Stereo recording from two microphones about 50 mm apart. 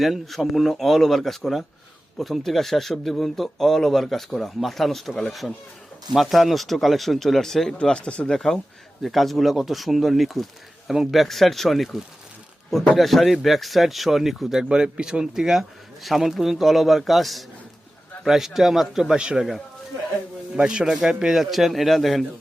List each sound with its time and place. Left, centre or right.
0.0 s speech: centre
7.8 s speech: centre
8.3 s speech: centre
13.0 s speech: centre
19.1 s speech: centre
20.6 s a man's voice: centre